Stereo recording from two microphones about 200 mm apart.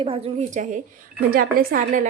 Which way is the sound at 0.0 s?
30° right (ahead or behind).